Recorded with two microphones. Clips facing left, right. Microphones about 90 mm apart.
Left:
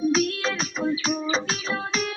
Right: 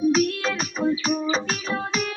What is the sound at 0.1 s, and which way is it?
Music, 45° right (ahead or behind).